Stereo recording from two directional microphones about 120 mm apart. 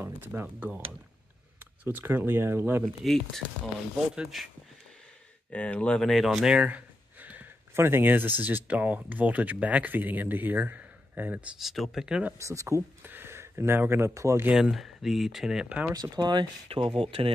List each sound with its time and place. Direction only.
0.0 s speech: 15° right (ahead or behind)
2.8 s speech: centre (ahead or behind)
5.5 s speech: 10° left (ahead or behind); by 12.4 s 10° right (ahead or behind)
12.4 s speech: 25° right (ahead or behind)
14.5 s speech: 5° right (ahead or behind)
15.9 s speech: 35° right (ahead or behind)
16.6 s speech: 50° right (ahead or behind)